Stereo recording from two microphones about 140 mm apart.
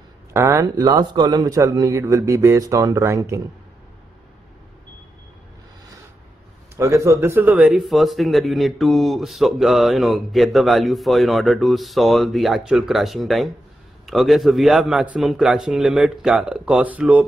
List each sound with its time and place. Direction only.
0.3 s a man's voice: 20° right (ahead or behind)
6.8 s speech: 20° right (ahead or behind)